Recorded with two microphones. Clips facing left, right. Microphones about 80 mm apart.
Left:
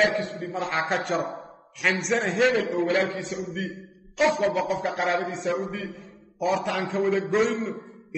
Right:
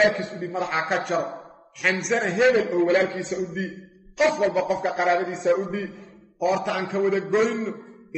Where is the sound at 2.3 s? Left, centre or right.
Centre.